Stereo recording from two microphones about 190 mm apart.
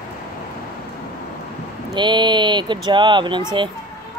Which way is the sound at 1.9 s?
25° right (ahead or behind).